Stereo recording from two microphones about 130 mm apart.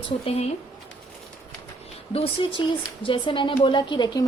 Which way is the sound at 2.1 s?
45° left (ahead or behind).